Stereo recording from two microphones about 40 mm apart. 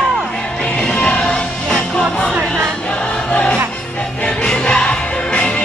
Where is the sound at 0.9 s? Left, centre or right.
Left.